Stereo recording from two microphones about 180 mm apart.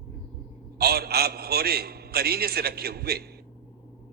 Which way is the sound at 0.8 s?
60° right (ahead or behind).